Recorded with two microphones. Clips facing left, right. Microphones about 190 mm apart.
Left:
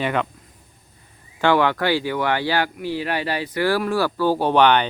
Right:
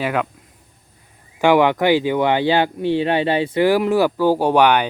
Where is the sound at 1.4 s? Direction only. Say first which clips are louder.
Right 4 dB; 15° right (ahead or behind).